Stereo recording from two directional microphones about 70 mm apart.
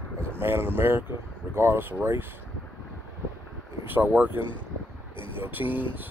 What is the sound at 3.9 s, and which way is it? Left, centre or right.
Speech, right.